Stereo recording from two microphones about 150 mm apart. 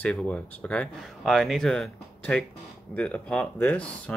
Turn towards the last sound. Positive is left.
turn(degrees=5)  # may be behind; listen again after turning